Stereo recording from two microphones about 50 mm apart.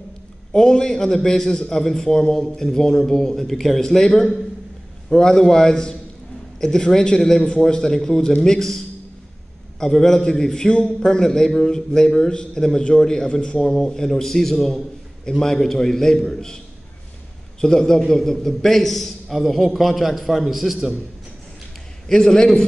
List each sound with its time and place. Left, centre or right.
0.5 s a man's voice: centre
17.6 s a man's voice: centre
22.0 s a man's voice: centre